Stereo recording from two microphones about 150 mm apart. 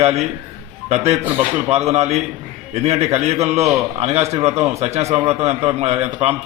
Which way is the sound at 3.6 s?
20° right (ahead or behind).